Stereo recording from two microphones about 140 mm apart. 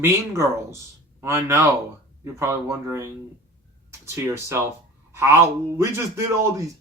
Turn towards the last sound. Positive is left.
turn(degrees=-20)  # may be behind; listen again after turning